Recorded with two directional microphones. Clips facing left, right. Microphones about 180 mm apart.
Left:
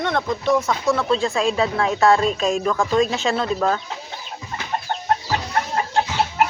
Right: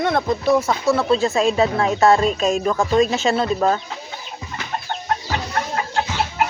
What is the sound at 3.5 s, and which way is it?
Speech, 25° right (ahead or behind).